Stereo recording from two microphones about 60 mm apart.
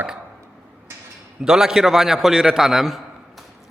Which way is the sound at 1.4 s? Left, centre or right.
Centre.